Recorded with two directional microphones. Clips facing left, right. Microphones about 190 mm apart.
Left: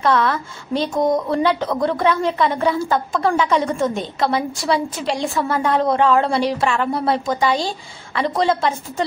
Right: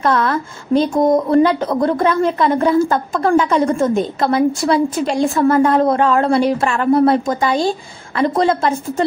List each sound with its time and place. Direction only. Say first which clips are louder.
0.0 s a woman's voice: right 2 dB; 45° right (ahead or behind)